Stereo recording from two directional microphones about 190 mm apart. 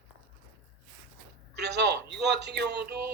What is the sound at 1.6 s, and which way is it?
A man's voice, 65° right (ahead or behind).